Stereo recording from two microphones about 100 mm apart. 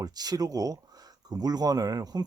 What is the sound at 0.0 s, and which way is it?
Speech, 40° right (ahead or behind).